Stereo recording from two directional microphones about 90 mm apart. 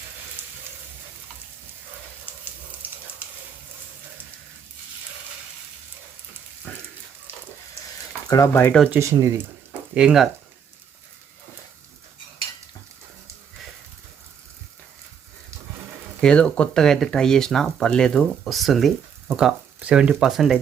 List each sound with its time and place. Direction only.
2.4 s a sound: 20° right (ahead or behind)
6.7 s rain on surface: 15° left (ahead or behind)
7.3 s a sound: 25° right (ahead or behind)
8.3 s speech: 45° left (ahead or behind)
9.0 s speech: 35° right (ahead or behind)
9.9 s speech: 10° right (ahead or behind)
16.2 s speech: 10° left (ahead or behind)